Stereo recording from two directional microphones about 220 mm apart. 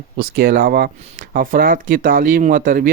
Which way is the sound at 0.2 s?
45° right (ahead or behind).